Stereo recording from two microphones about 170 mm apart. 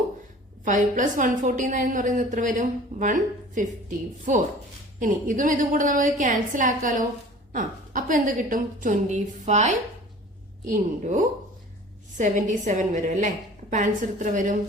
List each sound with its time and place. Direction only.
0.6 s a woman's voice: 50° right (ahead or behind)